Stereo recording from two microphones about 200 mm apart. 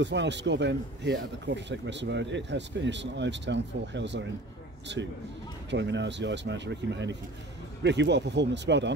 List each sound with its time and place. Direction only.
0.0 s speech: 60° right (ahead or behind)